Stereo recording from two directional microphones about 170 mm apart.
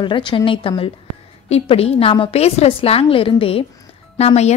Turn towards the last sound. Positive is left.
turn(degrees=40)  # may be behind; listen again after turning